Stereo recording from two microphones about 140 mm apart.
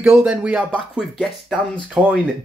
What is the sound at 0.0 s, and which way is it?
Speech, 15° right (ahead or behind).